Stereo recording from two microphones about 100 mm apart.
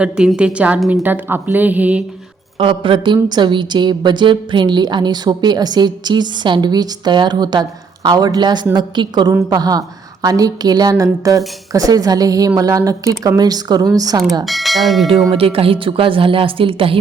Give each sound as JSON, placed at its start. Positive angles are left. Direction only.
{"t": 0.0, "sound": "a woman's voice", "side_deg": -10}
{"t": 2.6, "sound": "a woman's voice", "side_deg": -60}
{"t": 14.4, "sound": "speech", "side_deg": 0}
{"t": 15.3, "sound": "speech", "side_deg": -70}